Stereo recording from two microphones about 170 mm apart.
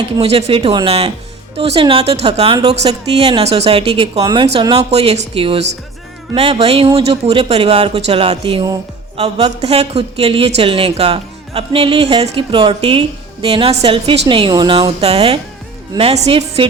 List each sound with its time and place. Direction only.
0.2 s speech: 35° right (ahead or behind)
0.7 s speech: 25° right (ahead or behind)
1.5 s speech: 35° right (ahead or behind)
3.2 s speech: 35° right (ahead or behind)
4.2 s speech: 25° right (ahead or behind)
4.8 s speech: 35° right (ahead or behind)
15.0 s speech: 35° right (ahead or behind)